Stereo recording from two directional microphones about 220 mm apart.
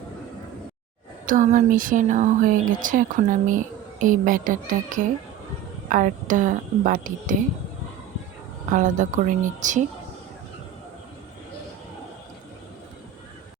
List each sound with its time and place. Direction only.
1.3 s speech: 35° right (ahead or behind)
8.7 s speech: 35° right (ahead or behind)